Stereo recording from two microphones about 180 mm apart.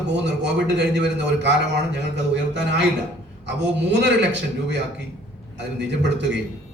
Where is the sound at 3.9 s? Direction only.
75° right (ahead or behind).